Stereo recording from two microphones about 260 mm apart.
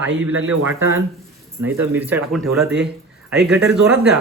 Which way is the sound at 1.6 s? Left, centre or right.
Centre.